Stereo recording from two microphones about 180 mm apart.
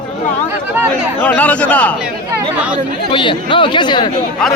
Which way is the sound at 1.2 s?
10° left (ahead or behind).